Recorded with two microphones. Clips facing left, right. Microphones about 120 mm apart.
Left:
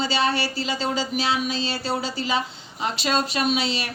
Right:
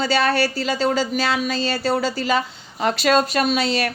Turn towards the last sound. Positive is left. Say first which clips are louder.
# right 4 dB
turn(degrees=-50)  # may be behind; listen again after turning